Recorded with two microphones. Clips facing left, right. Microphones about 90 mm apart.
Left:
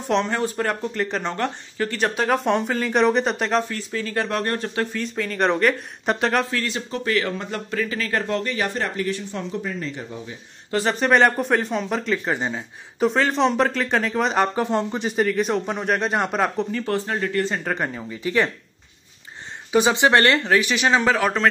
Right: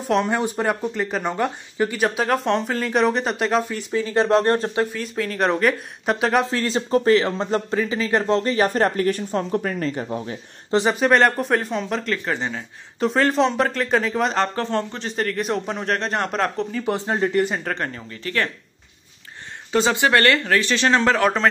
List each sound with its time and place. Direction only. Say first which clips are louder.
0.0 s speech: right 1 dB; 5° right (ahead or behind)
0.3 s speech: right 2 dB; 15° right (ahead or behind)
3.7 s speech: right 5 dB; 15° right (ahead or behind)
4.9 s speech: even; 5° right (ahead or behind)
6.4 s speech: right 4 dB; 30° right (ahead or behind)
8.4 s speech: right 6 dB; 35° right (ahead or behind); by 10.3 s 55° right (ahead or behind)
10.9 s speech: even; centre (ahead or behind)
12.3 s speech: left 1 dB; 15° left (ahead or behind)
13.0 s speech: right 1 dB; centre (ahead or behind)
16.8 s speech: right 2 dB; 20° right (ahead or behind)
17.6 s speech: left 1 dB; 10° left (ahead or behind)
19.7 s speech: left 1 dB; 15° left (ahead or behind)